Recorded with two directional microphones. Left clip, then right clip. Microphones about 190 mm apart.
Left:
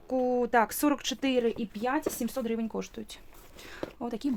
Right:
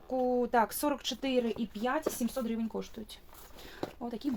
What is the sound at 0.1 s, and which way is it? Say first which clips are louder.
Speech: left 3 dB; 50° left (ahead or behind).